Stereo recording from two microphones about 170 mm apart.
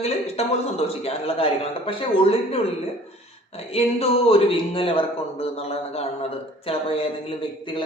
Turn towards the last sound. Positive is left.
turn(degrees=30)  # may be behind; listen again after turning